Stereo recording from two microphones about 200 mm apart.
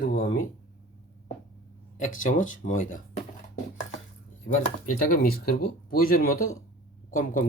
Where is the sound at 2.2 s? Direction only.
40° left (ahead or behind).